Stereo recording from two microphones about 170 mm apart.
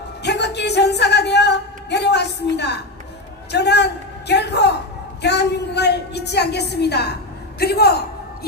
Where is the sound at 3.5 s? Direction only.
80° left.